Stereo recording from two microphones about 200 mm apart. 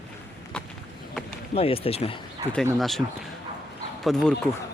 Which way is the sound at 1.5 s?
30° left (ahead or behind).